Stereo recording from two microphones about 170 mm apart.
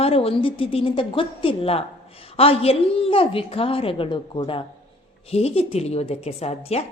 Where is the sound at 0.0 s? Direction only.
35° left (ahead or behind).